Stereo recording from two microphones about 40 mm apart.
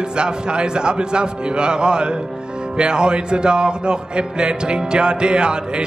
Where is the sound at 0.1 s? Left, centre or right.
Right.